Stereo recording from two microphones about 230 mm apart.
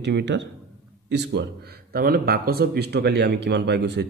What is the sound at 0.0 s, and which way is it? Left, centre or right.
Speech, right.